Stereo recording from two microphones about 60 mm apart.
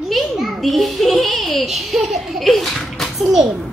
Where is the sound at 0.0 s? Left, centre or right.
Centre.